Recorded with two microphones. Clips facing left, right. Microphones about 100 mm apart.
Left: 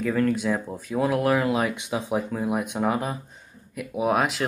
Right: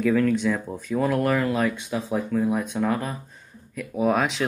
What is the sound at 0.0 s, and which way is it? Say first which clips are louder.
Speech: right 3 dB; centre (ahead or behind).